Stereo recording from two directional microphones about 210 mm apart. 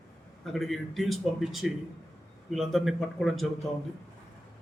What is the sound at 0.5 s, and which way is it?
A man's voice, centre (ahead or behind).